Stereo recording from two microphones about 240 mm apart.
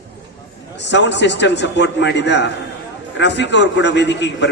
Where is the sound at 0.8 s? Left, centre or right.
Left.